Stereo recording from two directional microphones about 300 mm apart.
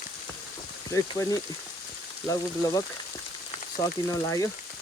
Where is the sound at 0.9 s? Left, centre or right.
Centre.